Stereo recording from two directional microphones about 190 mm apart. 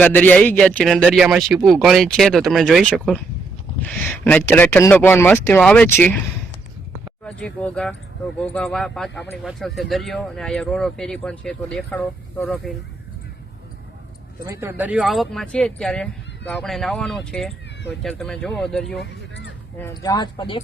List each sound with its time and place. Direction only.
0.0 s speech: 10° left (ahead or behind)
7.3 s speech: 5° left (ahead or behind)
14.4 s speech: 15° right (ahead or behind); by 18.9 s 5° left (ahead or behind)
19.9 s speech: 20° left (ahead or behind)